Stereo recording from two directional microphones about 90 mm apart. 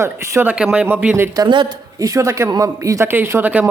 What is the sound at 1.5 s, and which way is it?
Speech, 60° right (ahead or behind).